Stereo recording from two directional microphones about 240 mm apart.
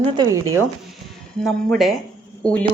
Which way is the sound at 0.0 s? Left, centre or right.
Centre.